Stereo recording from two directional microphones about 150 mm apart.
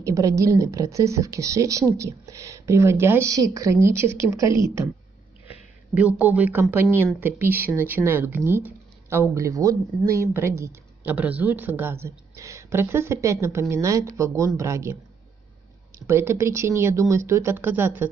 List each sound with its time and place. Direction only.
0.0 s a woman's voice: 20° right (ahead or behind)
5.5 s a woman's voice: 10° right (ahead or behind)
16.1 s a woman's voice: 15° right (ahead or behind)